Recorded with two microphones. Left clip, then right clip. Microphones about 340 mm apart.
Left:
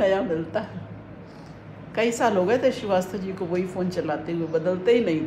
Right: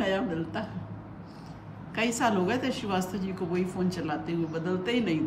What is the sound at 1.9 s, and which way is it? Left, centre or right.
A man's voice, centre.